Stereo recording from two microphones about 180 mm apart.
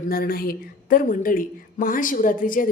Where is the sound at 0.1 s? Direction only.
55° left (ahead or behind).